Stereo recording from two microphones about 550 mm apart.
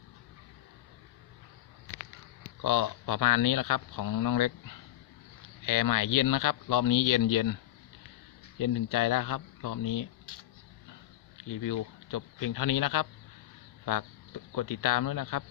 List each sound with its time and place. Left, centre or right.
2.0 s speech: left
11.4 s speech: left